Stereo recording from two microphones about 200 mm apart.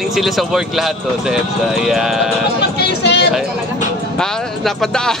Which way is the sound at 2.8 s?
60° left (ahead or behind).